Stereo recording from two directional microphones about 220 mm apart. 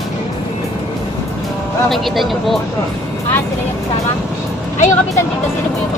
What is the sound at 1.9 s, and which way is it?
Speech, centre (ahead or behind).